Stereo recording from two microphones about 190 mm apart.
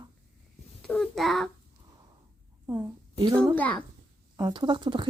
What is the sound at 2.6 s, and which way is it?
Speech, 10° right (ahead or behind).